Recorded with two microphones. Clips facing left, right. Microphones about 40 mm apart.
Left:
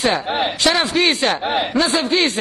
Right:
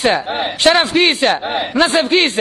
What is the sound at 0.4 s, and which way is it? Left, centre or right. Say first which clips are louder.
Speech: right 6 dB; right.